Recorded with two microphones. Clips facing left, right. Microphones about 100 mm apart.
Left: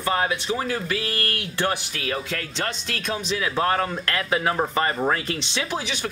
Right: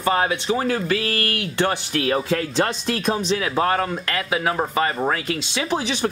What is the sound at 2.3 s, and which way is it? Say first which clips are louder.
Speech: right 8 dB; 40° right (ahead or behind).